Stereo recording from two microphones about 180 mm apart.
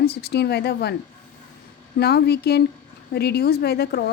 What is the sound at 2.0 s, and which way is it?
A woman's voice, 65° left (ahead or behind).